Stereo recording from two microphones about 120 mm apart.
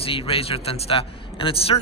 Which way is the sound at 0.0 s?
50° left (ahead or behind).